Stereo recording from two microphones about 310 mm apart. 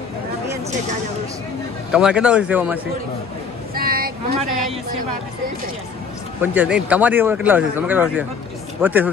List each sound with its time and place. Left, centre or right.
1.9 s speech: centre
3.7 s a sound: right
6.4 s speech: centre